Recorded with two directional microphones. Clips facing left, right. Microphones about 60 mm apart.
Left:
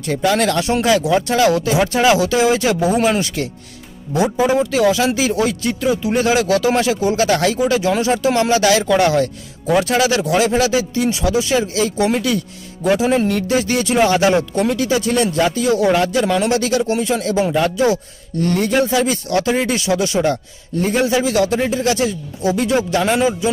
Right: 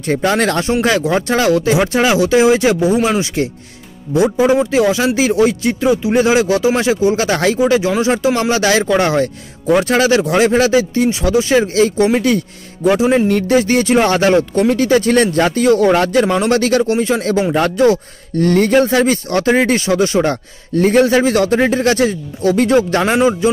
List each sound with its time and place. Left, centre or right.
0.0 s speech: right
12.9 s speech: right
13.3 s a man's voice: right
16.9 s a man's voice: right
20.7 s a man's voice: right